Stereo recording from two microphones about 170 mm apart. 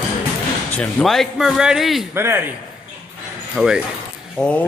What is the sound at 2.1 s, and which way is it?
Speech, 15° right (ahead or behind).